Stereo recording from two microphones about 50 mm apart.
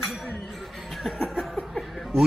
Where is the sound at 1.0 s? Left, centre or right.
Centre.